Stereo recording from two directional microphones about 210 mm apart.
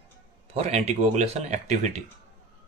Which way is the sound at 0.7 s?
30° right (ahead or behind).